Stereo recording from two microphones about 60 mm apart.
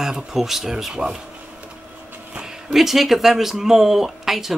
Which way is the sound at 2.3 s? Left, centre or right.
Centre.